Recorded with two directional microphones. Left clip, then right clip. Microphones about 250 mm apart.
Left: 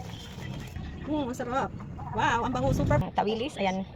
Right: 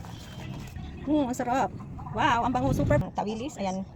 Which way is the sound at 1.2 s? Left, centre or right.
Right.